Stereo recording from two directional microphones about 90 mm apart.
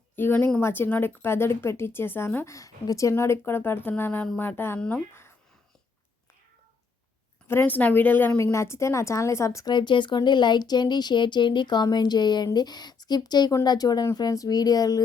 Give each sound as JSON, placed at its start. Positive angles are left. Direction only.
{"t": 0.2, "sound": "speech", "side_deg": 20}
{"t": 4.8, "sound": "speech", "side_deg": 10}
{"t": 7.4, "sound": "a woman's voice", "side_deg": 25}
{"t": 9.6, "sound": "speech", "side_deg": 55}